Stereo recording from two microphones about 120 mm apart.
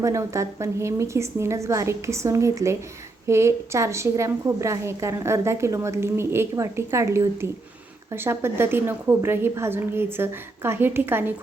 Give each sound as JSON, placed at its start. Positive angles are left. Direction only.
{"t": 0.0, "sound": "a woman's voice", "side_deg": -25}